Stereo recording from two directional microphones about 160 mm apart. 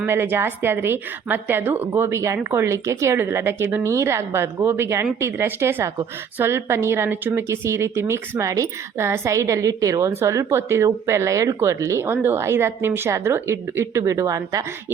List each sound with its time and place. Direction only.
0.0 s a woman's voice: 15° right (ahead or behind)